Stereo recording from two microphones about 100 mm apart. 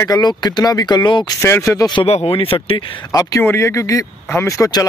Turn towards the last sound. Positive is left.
turn(degrees=35)  # may be behind; listen again after turning